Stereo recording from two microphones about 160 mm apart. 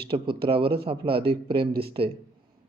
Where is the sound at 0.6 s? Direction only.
80° right.